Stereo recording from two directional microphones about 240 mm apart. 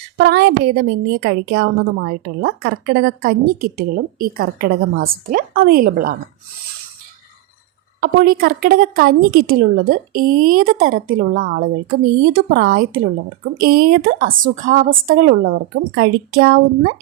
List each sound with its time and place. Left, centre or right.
0.2 s a woman's voice: right
8.0 s a woman's voice: right